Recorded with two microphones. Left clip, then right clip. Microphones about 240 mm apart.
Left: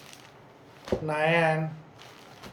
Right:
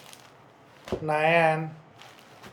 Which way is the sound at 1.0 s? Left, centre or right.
Centre.